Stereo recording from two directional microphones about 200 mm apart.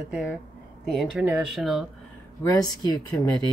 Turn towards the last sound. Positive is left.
turn(degrees=20)  # may be behind; listen again after turning